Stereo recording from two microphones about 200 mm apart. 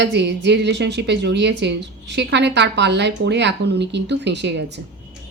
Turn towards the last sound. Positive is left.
turn(degrees=-60)  # may be behind; listen again after turning